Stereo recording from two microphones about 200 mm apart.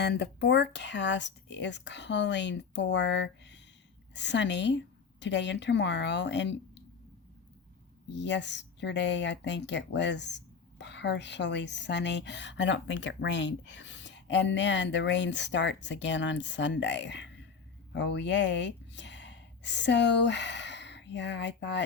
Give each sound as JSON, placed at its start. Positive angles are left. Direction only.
{"t": 0.0, "sound": "speech", "side_deg": 55}
{"t": 8.1, "sound": "speech", "side_deg": 60}